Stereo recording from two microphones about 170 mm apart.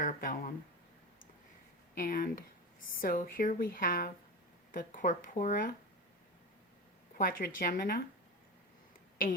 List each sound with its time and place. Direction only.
0.0 s speech: 50° left (ahead or behind)
2.0 s speech: 55° left (ahead or behind)
7.2 s speech: 55° left (ahead or behind)